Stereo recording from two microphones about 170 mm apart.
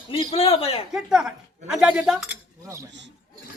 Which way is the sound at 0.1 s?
35° left (ahead or behind).